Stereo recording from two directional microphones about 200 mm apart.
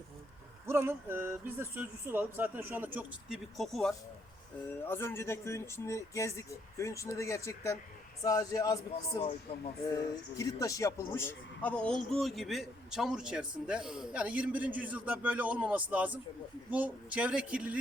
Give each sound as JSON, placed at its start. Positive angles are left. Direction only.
{"t": 0.7, "sound": "a man's voice", "side_deg": -10}